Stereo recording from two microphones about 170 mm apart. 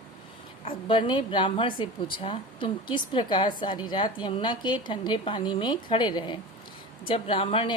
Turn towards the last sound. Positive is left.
turn(degrees=30)  # may be behind; listen again after turning